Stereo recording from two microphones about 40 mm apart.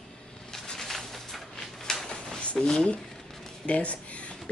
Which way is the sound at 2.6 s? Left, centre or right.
Centre.